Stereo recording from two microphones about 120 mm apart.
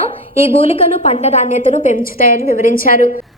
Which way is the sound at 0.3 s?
55° left (ahead or behind).